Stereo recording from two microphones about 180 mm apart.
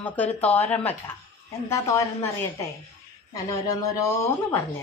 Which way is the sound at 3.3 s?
20° left (ahead or behind).